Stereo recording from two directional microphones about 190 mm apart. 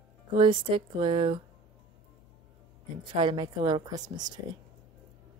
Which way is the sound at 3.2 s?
25° right (ahead or behind).